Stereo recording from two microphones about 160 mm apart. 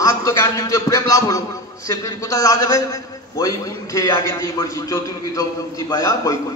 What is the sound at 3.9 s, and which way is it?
A man's voice, 15° left (ahead or behind).